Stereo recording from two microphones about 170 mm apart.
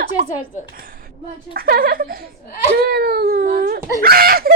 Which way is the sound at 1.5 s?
60° right (ahead or behind).